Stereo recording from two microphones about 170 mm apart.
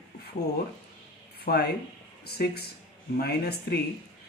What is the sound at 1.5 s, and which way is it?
Speech, 60° left (ahead or behind).